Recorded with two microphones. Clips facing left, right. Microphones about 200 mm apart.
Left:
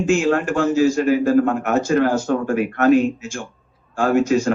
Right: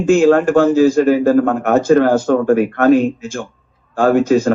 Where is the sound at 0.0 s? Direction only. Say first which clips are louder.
Right 7 dB; 55° right (ahead or behind).